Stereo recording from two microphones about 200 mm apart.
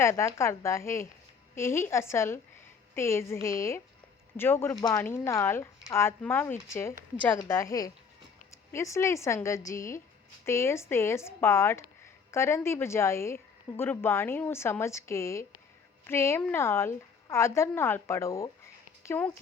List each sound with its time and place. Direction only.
0.0 s a woman's voice: 15° left (ahead or behind)